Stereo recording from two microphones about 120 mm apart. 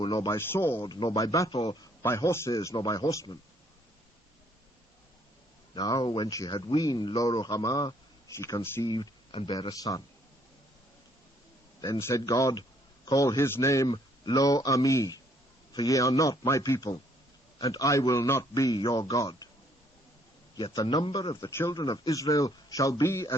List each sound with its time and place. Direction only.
0.0 s speech: 40° left (ahead or behind)
0.3 s speech: 20° left (ahead or behind)
0.8 s speech: 40° left (ahead or behind)
1.1 s speech: 30° left (ahead or behind)
5.7 s speech: 35° left (ahead or behind)
8.8 s speech: 40° left (ahead or behind)
9.5 s speech: 35° left (ahead or behind)
11.8 s speech: 25° left (ahead or behind)
20.6 s a man's voice: 45° left (ahead or behind)
21.4 s speech: 20° left (ahead or behind)
21.7 s speech: 35° left (ahead or behind)